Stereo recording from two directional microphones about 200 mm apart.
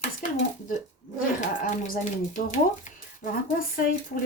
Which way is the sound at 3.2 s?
40° left (ahead or behind).